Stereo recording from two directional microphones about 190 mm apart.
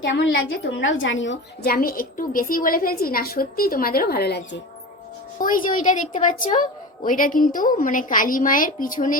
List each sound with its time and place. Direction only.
0.0 s a woman's voice: 70° left (ahead or behind)
1.7 s a woman's voice: 50° left (ahead or behind)
5.4 s a woman's voice: 45° left (ahead or behind)